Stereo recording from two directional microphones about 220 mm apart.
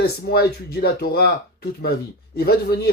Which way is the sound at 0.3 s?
45° left (ahead or behind).